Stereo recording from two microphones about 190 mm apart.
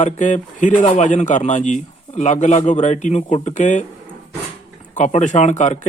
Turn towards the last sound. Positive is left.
turn(degrees=40)  # may be behind; listen again after turning